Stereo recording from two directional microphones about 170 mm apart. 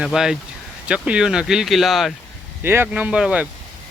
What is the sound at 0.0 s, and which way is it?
Speech, 5° right (ahead or behind).